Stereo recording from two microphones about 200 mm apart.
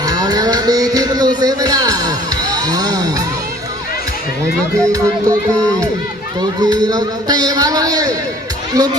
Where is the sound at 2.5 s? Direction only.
20° right (ahead or behind).